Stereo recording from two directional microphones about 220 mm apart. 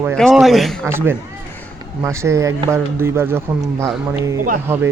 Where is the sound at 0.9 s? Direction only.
10° right (ahead or behind).